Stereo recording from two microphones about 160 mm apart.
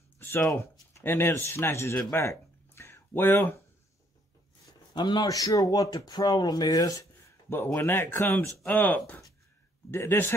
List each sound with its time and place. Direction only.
0.2 s speech: 15° left (ahead or behind)
4.9 s speech: 25° left (ahead or behind)